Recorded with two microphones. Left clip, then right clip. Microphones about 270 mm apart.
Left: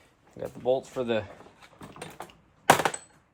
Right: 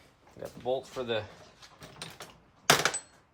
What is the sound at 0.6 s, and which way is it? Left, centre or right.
Speech, left.